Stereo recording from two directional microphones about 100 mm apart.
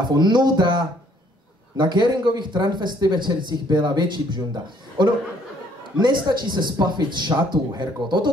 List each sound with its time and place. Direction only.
0.0 s speech: 45° right (ahead or behind)
5.9 s speech: 50° right (ahead or behind)